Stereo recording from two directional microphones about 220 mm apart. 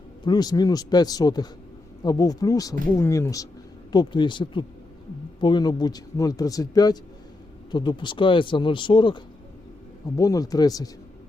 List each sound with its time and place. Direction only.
0.3 s speech: 20° left (ahead or behind)